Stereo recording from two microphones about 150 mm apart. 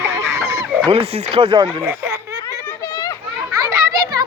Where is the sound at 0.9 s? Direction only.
40° right (ahead or behind).